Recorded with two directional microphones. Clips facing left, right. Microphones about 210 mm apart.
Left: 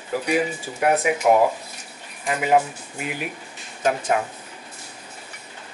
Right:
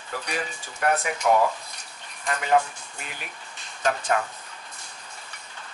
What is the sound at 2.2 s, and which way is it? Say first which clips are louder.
Speech: left 3 dB; 10° left (ahead or behind).